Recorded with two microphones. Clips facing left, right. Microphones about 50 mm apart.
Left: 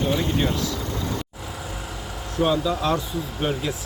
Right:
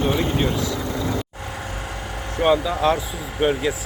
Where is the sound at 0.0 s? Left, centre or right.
Centre.